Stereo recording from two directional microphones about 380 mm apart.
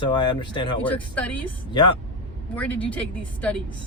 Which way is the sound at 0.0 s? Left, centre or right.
Centre.